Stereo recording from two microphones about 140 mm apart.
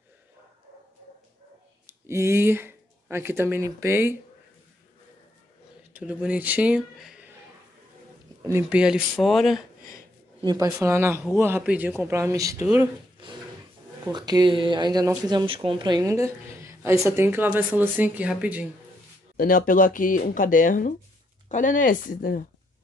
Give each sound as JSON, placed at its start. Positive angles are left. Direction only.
{"t": 1.9, "sound": "speech", "side_deg": -20}
{"t": 5.9, "sound": "speech", "side_deg": -10}
{"t": 8.5, "sound": "speech", "side_deg": -20}
{"t": 8.7, "sound": "speech", "side_deg": -5}
{"t": 10.4, "sound": "a man's voice", "side_deg": -25}
{"t": 14.1, "sound": "speech", "side_deg": -30}
{"t": 19.3, "sound": "speech", "side_deg": 85}